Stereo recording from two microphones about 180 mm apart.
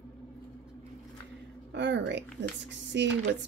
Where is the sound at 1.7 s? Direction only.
75° right (ahead or behind).